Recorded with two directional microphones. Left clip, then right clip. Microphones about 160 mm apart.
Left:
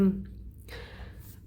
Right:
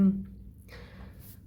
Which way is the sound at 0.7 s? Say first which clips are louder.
Left 5 dB; 25° left (ahead or behind).